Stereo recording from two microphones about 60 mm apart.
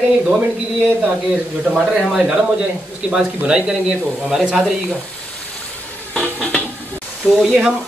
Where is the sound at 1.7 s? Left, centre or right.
Centre.